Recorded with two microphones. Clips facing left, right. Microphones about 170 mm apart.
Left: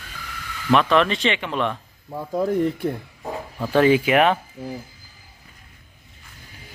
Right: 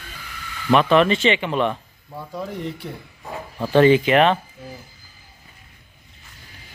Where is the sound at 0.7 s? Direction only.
Centre (ahead or behind).